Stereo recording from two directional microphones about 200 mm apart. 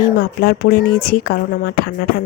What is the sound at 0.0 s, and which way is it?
Speech, 50° left (ahead or behind).